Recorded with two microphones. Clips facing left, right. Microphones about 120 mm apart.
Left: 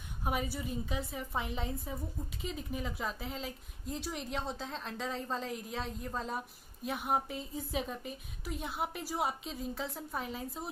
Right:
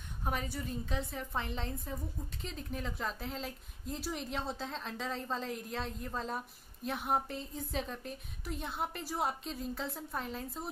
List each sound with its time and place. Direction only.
0.2 s a woman's voice: 10° left (ahead or behind)